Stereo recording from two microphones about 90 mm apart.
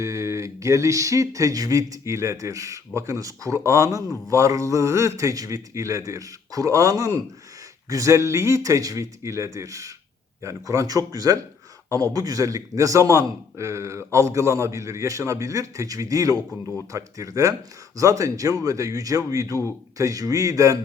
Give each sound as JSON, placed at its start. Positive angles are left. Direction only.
{"t": 0.0, "sound": "a man's voice", "side_deg": -35}